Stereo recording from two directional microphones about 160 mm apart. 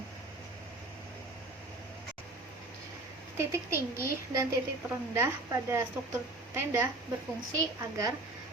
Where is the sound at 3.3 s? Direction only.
15° right (ahead or behind).